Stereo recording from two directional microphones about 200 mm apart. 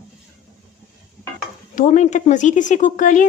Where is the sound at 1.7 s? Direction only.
35° left (ahead or behind).